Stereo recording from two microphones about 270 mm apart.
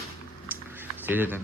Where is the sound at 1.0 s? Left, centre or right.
Centre.